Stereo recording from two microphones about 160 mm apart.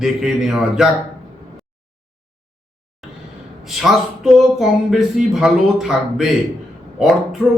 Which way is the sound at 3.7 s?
Centre (ahead or behind).